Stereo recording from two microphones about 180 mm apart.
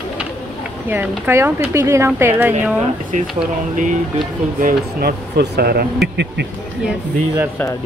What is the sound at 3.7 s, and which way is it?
Speech, 45° right (ahead or behind).